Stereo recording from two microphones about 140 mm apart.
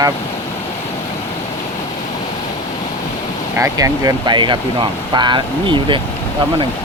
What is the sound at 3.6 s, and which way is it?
Speech, 20° right (ahead or behind).